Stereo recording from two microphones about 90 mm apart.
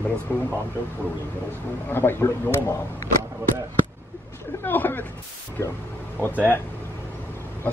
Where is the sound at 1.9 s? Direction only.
25° left (ahead or behind).